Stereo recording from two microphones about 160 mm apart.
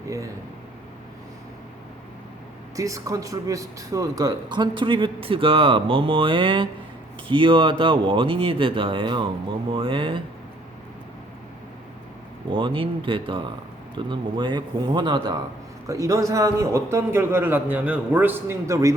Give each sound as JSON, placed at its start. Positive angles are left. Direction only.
{"t": 2.7, "sound": "a man's voice", "side_deg": -20}
{"t": 12.5, "sound": "a man's voice", "side_deg": -30}